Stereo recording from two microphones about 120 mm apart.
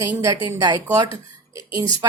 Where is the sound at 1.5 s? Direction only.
30° right (ahead or behind).